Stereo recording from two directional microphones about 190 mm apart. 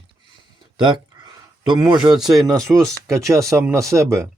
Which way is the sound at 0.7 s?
25° right (ahead or behind).